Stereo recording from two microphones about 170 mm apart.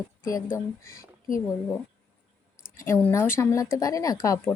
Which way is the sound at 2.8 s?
15° left (ahead or behind).